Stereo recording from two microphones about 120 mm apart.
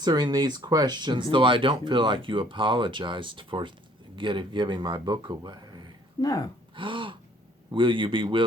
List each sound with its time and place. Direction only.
0.0 s speech: 35° right (ahead or behind)
6.2 s speech: 30° left (ahead or behind)
6.7 s speech: 45° right (ahead or behind)